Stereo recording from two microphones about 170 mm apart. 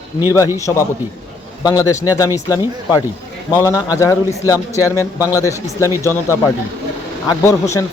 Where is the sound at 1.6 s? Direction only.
20° left (ahead or behind).